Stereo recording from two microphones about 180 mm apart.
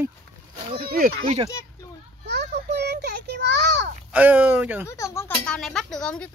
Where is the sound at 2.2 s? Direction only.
70° right (ahead or behind).